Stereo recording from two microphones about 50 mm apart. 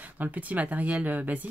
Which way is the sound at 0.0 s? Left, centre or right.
Right.